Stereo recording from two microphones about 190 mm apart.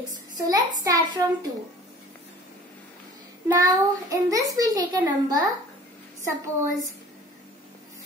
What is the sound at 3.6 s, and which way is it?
A child's voice, 20° right (ahead or behind).